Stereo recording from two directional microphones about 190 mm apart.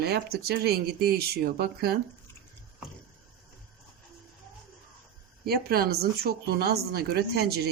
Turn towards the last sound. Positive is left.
turn(degrees=-55)  # may be behind; listen again after turning